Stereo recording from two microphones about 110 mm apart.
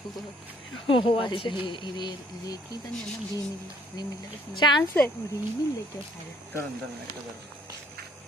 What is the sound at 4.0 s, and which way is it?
Speech, 40° left (ahead or behind).